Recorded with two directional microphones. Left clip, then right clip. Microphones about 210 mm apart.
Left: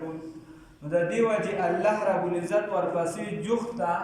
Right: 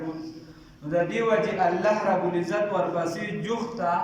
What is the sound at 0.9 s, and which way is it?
A man's voice, 10° left (ahead or behind).